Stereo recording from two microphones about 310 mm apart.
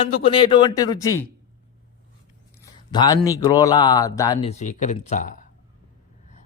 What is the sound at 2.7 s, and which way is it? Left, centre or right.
A man's voice, centre.